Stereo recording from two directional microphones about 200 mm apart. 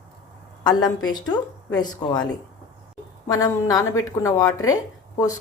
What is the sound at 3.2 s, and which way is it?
A woman's voice, 15° left (ahead or behind).